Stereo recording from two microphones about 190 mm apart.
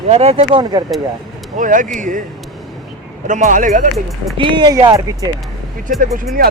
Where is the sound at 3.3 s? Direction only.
40° right (ahead or behind).